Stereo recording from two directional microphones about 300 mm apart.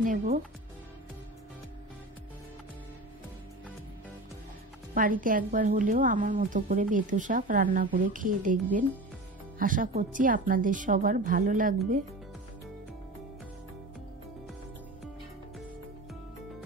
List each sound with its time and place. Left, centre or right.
0.0 s a woman's voice: right
4.9 s a woman's voice: right
9.6 s a woman's voice: right